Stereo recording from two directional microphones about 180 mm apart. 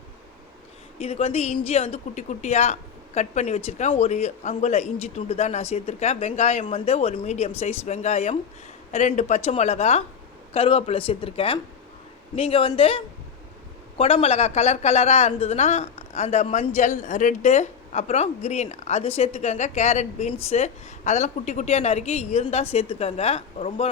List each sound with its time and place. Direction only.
0.9 s speech: 35° left (ahead or behind)
14.0 s speech: 35° left (ahead or behind)